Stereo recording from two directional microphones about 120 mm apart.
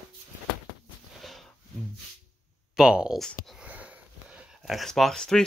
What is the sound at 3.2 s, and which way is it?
Speech, 5° left (ahead or behind).